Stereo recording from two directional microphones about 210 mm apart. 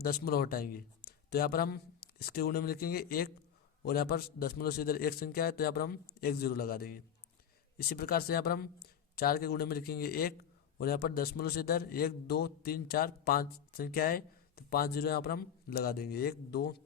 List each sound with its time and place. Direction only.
0.0 s a man's voice: 45° left (ahead or behind)